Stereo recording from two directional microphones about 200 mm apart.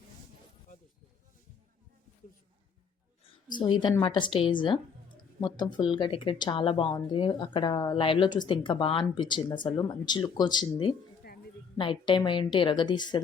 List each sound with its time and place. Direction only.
3.6 s speech: 20° left (ahead or behind)
11.2 s a sound: 50° left (ahead or behind)
11.8 s speech: 25° left (ahead or behind)